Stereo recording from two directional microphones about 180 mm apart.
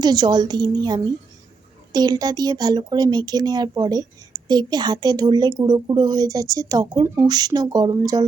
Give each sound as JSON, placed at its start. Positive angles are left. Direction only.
{"t": 0.0, "sound": "speech", "side_deg": -25}